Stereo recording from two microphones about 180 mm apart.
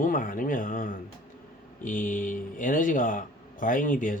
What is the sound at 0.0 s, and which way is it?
Speech, 50° left (ahead or behind).